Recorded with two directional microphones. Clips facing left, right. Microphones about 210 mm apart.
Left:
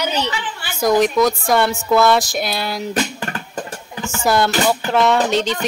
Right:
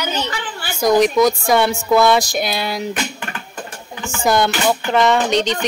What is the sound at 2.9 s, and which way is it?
Guitar, 40° left (ahead or behind).